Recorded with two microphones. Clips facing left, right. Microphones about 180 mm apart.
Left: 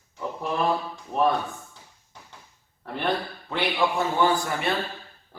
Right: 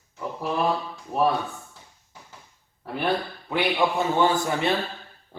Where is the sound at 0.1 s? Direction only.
Centre (ahead or behind).